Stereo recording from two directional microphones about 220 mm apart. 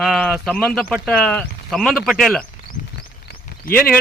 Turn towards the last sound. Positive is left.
turn(degrees=5)  # may be behind; listen again after turning